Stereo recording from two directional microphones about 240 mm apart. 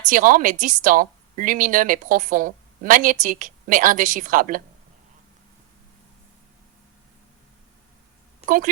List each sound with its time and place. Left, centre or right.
0.1 s a woman's voice: right
8.4 s a woman's voice: right